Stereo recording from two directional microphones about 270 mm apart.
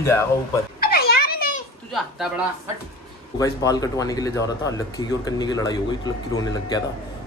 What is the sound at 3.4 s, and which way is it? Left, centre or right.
Speech, centre.